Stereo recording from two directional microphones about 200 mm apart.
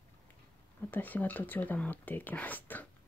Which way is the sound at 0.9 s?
10° left (ahead or behind).